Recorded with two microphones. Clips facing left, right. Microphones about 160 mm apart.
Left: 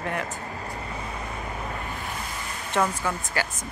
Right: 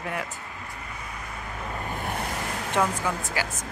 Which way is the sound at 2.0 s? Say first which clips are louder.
Right 4 dB; 60° right (ahead or behind).